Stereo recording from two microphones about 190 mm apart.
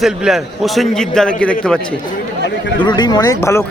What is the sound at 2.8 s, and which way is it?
Speech, 25° left (ahead or behind).